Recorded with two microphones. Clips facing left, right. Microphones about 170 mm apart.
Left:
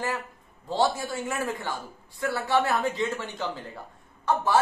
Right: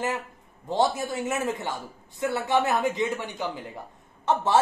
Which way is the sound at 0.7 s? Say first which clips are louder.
Right 1 dB; 20° right (ahead or behind).